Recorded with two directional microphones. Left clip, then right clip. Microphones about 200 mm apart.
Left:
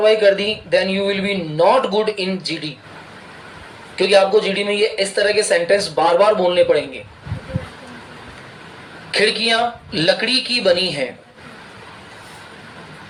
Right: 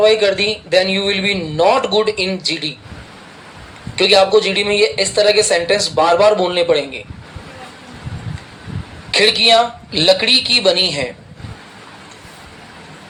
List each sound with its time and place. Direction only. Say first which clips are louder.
0.0 s speech: right 1 dB; 20° right (ahead or behind)
3.9 s speech: right 2 dB; 20° right (ahead or behind)
9.1 s speech: right 5 dB; 20° right (ahead or behind)